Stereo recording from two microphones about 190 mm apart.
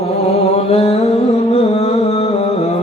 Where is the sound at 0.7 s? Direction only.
35° left (ahead or behind).